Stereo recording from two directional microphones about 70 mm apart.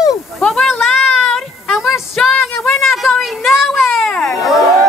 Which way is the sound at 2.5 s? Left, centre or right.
Left.